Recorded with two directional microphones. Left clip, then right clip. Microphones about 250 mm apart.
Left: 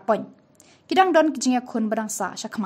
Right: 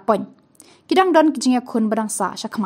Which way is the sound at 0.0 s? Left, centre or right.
Centre.